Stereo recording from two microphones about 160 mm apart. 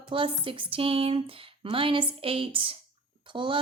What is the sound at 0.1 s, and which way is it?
Speech, 30° right (ahead or behind).